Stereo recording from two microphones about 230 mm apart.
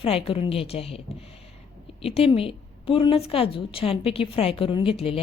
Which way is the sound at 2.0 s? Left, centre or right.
Left.